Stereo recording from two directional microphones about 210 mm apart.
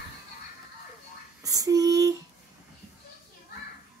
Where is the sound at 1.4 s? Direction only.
15° right (ahead or behind).